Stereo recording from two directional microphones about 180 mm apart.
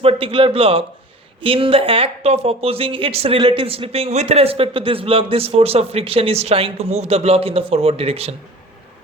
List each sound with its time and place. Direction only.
0.0 s speech: 30° right (ahead or behind)